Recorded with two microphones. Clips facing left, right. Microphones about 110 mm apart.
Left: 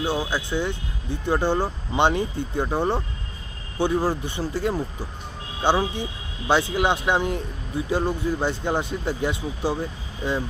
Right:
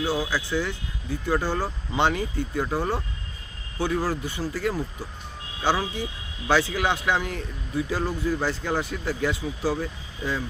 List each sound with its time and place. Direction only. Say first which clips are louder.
0.0 s speech: left 1 dB; 25° left (ahead or behind)